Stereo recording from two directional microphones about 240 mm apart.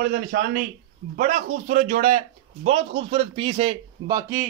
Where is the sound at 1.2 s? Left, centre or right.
Right; by 4.4 s centre.